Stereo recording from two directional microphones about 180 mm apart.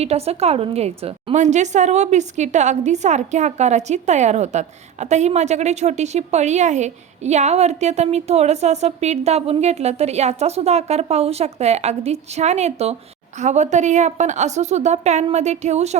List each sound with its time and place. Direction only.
0.0 s a woman's voice: 35° right (ahead or behind)